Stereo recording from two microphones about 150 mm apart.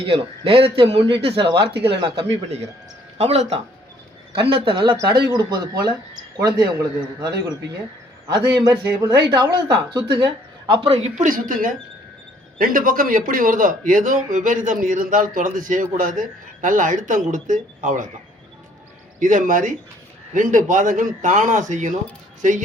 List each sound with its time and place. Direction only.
0.0 s speech: 40° right (ahead or behind)
3.2 s speech: 45° right (ahead or behind); by 7.5 s 25° right (ahead or behind)
8.6 s speech: 30° right (ahead or behind)
10.8 s speech: 45° right (ahead or behind)
19.2 s speech: 60° right (ahead or behind)